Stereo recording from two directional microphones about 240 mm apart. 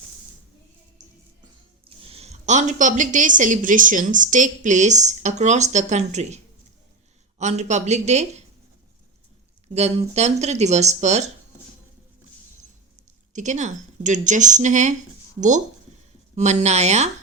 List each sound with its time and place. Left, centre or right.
1.8 s a woman's voice: right
9.7 s speech: right
13.3 s a woman's voice: right